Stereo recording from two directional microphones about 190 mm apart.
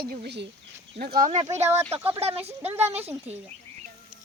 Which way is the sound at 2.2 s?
30° right (ahead or behind).